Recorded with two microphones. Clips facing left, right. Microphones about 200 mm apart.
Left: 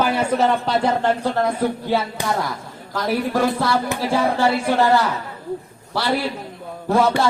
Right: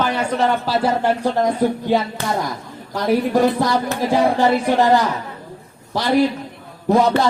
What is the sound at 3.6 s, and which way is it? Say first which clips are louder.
Speech: right 2 dB; 15° right (ahead or behind).